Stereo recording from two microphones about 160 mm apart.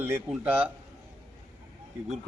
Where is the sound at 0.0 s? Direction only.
10° right (ahead or behind).